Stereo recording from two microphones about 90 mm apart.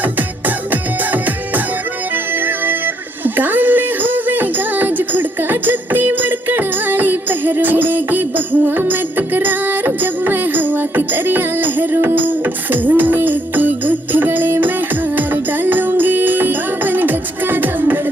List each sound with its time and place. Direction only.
0.0 s music: 20° right (ahead or behind)